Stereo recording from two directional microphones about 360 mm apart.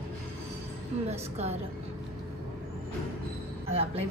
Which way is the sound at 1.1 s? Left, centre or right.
Centre.